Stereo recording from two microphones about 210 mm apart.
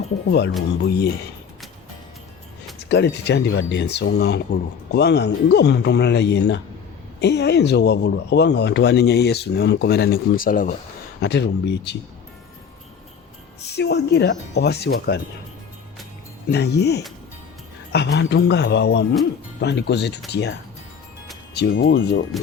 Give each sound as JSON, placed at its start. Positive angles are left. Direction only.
{"t": 0.3, "sound": "speech", "side_deg": 55}
{"t": 2.9, "sound": "speech", "side_deg": 55}
{"t": 11.2, "sound": "speech", "side_deg": 55}
{"t": 13.6, "sound": "speech", "side_deg": 50}
{"t": 16.5, "sound": "speech", "side_deg": 50}
{"t": 21.9, "sound": "speech", "side_deg": 65}